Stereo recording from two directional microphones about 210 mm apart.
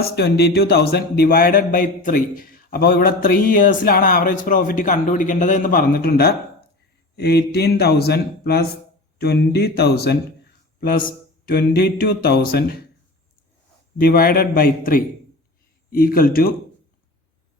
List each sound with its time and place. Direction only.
0.0 s speech: 50° left (ahead or behind)
14.0 s speech: 45° left (ahead or behind)